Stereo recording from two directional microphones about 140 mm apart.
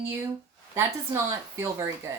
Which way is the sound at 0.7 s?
20° right (ahead or behind).